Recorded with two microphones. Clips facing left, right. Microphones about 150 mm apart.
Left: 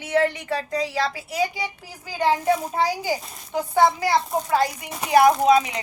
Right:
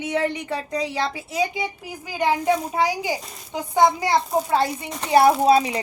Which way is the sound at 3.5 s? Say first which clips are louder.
Even; 20° right (ahead or behind).